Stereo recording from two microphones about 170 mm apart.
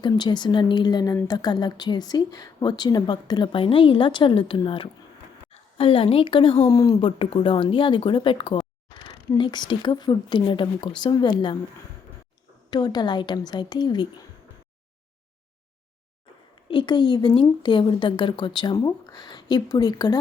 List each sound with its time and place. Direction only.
0.0 s a woman's voice: 25° left (ahead or behind)
7.2 s a woman's voice: 30° left (ahead or behind)
12.7 s a woman's voice: 25° left (ahead or behind)
16.6 s a woman's voice: 30° left (ahead or behind)